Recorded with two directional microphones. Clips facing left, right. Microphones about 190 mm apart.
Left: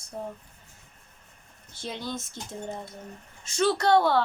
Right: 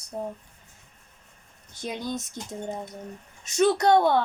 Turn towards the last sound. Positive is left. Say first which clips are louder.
# right 2 dB
turn(degrees=-20)  # may be behind; listen again after turning